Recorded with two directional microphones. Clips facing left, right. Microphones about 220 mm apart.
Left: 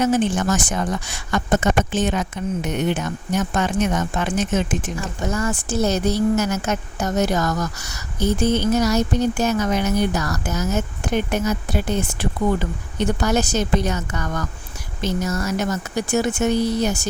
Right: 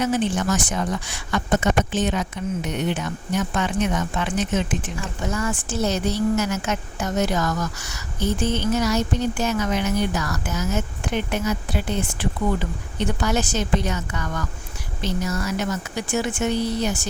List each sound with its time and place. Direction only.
0.0 s a woman's voice: 45° left (ahead or behind)